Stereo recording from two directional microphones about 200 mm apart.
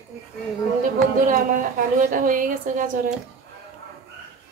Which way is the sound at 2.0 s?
40° right (ahead or behind).